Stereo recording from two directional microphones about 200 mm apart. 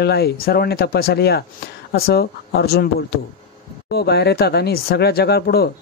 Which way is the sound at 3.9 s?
55° left (ahead or behind).